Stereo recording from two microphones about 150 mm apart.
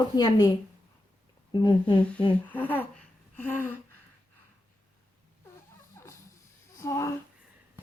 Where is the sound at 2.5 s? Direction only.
10° left (ahead or behind).